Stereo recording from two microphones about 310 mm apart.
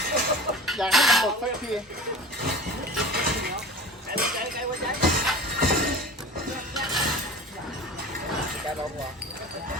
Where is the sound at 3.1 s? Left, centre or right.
Right.